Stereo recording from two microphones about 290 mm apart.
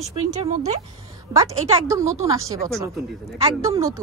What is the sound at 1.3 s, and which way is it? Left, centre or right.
Speech, centre.